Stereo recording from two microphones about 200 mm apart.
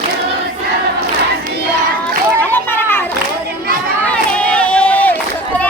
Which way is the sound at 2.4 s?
10° left (ahead or behind).